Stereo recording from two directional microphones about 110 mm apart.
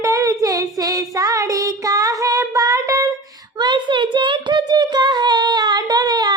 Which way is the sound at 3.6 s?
45° right (ahead or behind).